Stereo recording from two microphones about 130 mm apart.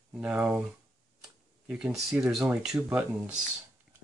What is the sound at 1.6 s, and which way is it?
Speech, 5° right (ahead or behind).